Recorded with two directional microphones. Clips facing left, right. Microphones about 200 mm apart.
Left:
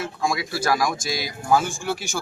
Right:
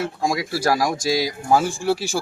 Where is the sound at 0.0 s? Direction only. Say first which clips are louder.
Right 3 dB; 35° right (ahead or behind).